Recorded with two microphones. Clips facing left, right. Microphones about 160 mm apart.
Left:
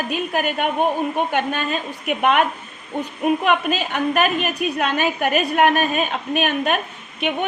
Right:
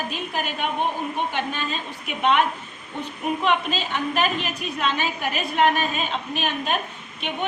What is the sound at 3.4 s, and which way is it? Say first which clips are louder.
A woman's voice: left 3 dB; 55° left (ahead or behind).